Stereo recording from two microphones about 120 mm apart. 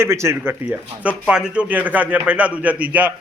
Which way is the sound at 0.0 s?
20° right (ahead or behind).